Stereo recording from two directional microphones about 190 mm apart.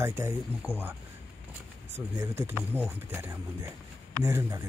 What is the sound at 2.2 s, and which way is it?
Speech, 10° right (ahead or behind).